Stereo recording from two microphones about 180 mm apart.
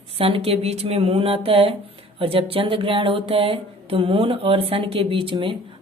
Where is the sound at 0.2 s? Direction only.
30° right (ahead or behind).